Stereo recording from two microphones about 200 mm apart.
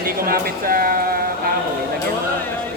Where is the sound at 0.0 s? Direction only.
45° right (ahead or behind).